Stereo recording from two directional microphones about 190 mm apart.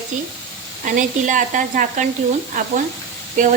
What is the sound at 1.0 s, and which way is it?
Speech, 45° right (ahead or behind).